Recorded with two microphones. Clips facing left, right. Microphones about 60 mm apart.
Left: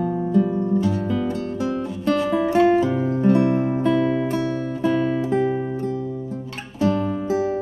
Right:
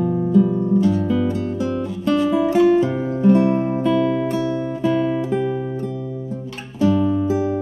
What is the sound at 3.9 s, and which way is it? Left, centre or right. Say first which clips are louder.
Music: right 2 dB; left.